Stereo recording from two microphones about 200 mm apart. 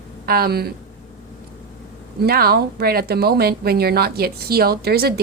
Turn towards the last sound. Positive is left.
turn(degrees=-50)  # may be behind; listen again after turning